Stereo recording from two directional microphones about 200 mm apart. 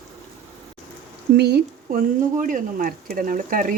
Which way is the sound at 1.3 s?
55° right (ahead or behind).